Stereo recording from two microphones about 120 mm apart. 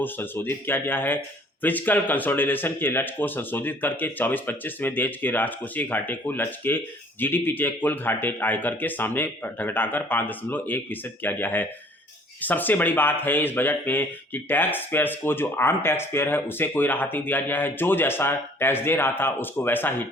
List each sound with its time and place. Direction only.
0.0 s speech: 15° left (ahead or behind)